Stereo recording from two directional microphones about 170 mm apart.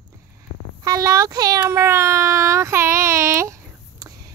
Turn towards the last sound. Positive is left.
turn(degrees=-15)  # may be behind; listen again after turning